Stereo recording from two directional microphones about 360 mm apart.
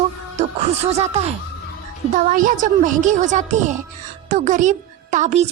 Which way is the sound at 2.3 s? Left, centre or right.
Right.